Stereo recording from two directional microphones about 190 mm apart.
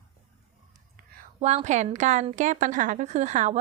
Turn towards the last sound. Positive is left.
turn(degrees=-40)  # may be behind; listen again after turning